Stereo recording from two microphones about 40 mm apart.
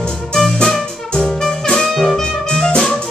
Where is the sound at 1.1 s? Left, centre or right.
Centre.